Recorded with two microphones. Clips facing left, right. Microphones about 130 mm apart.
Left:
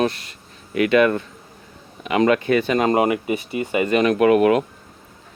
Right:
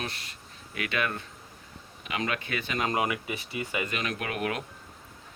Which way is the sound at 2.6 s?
40° left (ahead or behind).